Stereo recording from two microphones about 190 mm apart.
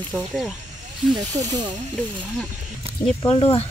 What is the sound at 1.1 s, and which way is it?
Speech, 20° right (ahead or behind).